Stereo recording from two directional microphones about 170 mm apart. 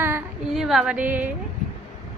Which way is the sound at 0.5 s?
Centre (ahead or behind).